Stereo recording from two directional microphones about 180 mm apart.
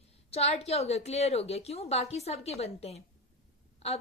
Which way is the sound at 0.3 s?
35° left (ahead or behind).